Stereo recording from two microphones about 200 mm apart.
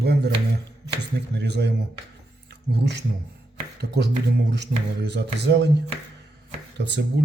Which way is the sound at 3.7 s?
55° right (ahead or behind).